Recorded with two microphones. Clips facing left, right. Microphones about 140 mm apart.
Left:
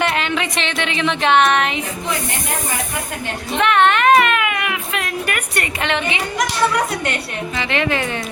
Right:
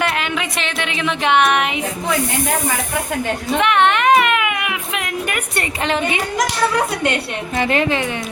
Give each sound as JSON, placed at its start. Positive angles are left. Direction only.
{"t": 0.0, "sound": "a sound", "side_deg": 0}
{"t": 0.3, "sound": "a woman's voice", "side_deg": -5}
{"t": 3.6, "sound": "speech", "side_deg": -15}
{"t": 7.5, "sound": "a woman's voice", "side_deg": -45}